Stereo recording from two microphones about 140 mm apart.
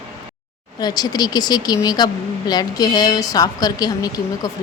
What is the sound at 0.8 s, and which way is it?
Speech, 30° left (ahead or behind).